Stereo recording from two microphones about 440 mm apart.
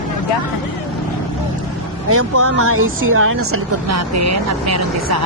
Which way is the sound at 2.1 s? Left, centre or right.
Right.